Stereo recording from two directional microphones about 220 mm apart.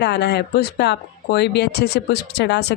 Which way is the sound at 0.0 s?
50° left (ahead or behind).